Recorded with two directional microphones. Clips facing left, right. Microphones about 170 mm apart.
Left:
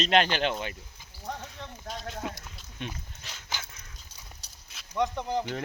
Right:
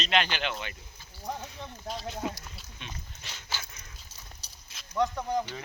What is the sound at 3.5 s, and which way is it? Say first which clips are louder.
Dog: left 1 dB; 15° left (ahead or behind).